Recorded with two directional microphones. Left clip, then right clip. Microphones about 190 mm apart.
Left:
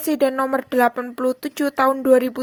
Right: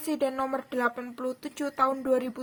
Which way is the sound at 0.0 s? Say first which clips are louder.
Left 9 dB; 35° left (ahead or behind).